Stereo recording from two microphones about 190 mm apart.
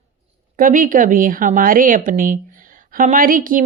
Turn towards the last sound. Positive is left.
turn(degrees=-45)  # may be behind; listen again after turning